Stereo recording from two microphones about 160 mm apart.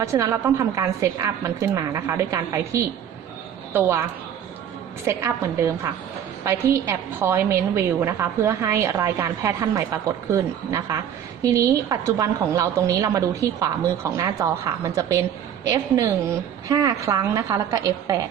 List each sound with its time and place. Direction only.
0.0 s a woman's voice: 20° right (ahead or behind)
5.0 s a woman's voice: 15° right (ahead or behind)